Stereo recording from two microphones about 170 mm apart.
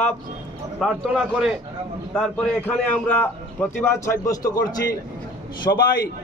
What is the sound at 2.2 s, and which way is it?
A man's voice, 10° left (ahead or behind).